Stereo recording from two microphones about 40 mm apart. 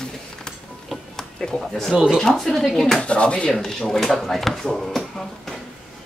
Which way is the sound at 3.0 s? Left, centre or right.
Left.